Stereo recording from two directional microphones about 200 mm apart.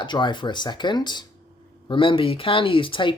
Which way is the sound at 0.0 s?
25° left (ahead or behind).